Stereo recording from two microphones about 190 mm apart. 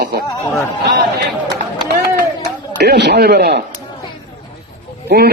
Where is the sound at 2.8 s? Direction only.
60° right (ahead or behind).